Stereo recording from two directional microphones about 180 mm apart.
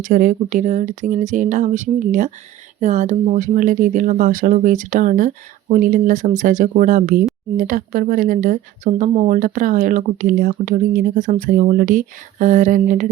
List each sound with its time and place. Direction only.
0.0 s speech: 45° right (ahead or behind)